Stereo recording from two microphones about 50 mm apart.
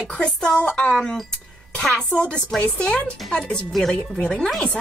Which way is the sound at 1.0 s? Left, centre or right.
Centre.